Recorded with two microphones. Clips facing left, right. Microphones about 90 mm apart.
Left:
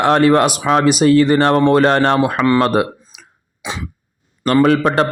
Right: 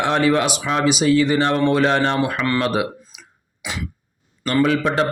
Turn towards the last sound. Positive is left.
turn(degrees=55)  # may be behind; listen again after turning